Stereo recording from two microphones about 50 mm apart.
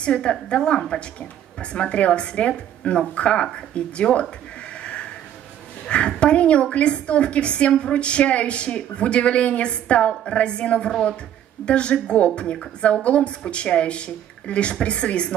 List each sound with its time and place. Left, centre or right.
0.0 s a woman's voice: centre
4.8 s a sound: left
5.9 s a woman's voice: left